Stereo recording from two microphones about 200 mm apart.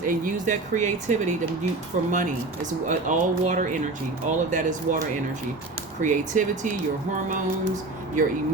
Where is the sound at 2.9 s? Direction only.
40° right (ahead or behind).